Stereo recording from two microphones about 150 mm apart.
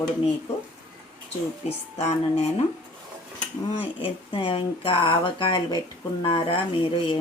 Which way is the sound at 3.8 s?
35° left (ahead or behind).